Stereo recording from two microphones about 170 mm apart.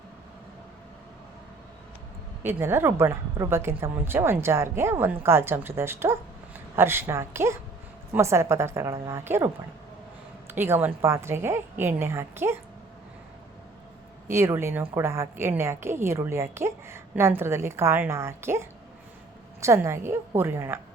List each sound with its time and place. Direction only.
2.4 s a woman's voice: 15° right (ahead or behind)
10.5 s a woman's voice: 10° right (ahead or behind)
14.3 s a woman's voice: 15° right (ahead or behind)